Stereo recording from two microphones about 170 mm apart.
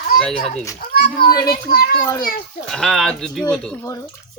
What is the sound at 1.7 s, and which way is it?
Speech, 60° left (ahead or behind).